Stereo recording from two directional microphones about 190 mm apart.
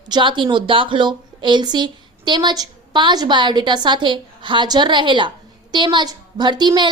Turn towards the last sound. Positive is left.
turn(degrees=-25)  # may be behind; listen again after turning